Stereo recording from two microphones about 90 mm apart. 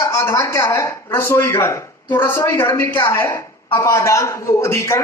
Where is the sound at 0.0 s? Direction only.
35° left (ahead or behind).